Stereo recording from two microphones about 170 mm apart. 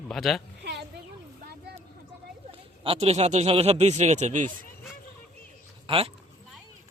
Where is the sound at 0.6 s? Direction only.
85° right.